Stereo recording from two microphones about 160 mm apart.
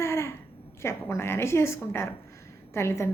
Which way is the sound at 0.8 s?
15° left (ahead or behind).